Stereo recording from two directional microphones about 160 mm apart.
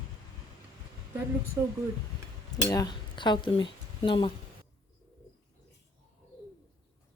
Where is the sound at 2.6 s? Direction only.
25° left (ahead or behind).